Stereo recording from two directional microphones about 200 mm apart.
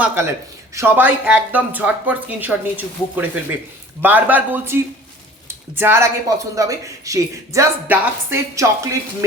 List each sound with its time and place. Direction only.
0.0 s speech: 10° right (ahead or behind)